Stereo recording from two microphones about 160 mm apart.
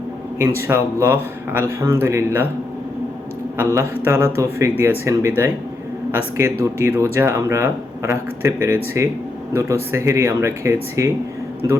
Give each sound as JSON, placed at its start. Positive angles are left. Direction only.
{"t": 0.7, "sound": "speech", "side_deg": -15}
{"t": 3.6, "sound": "speech", "side_deg": -15}